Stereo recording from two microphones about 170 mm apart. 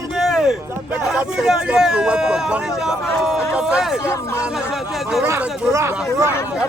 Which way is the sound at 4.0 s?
15° left (ahead or behind).